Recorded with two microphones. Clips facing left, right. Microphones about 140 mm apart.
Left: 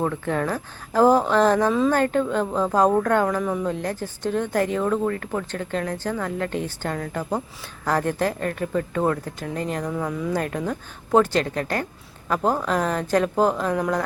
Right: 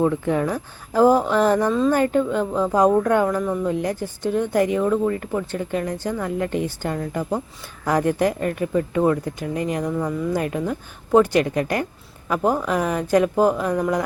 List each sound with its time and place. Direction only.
0.0 s speech: 15° right (ahead or behind)
3.4 s speech: 5° left (ahead or behind)
3.7 s speech: 15° right (ahead or behind)
9.9 s speech: centre (ahead or behind)
10.3 s speech: 10° right (ahead or behind)